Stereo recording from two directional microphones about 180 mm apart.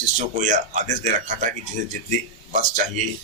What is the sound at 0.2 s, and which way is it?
Speech, 45° right (ahead or behind).